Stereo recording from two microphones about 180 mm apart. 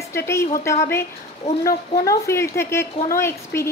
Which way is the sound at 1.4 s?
35° left (ahead or behind).